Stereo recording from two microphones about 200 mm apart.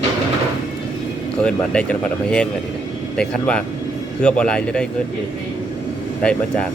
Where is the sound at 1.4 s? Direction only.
5° left (ahead or behind).